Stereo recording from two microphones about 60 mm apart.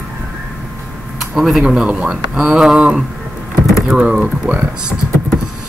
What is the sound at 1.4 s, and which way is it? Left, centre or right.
Speech, centre.